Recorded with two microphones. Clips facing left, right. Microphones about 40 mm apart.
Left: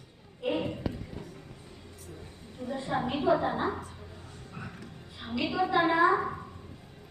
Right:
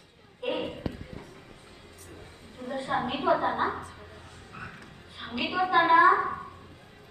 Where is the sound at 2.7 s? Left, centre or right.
Right.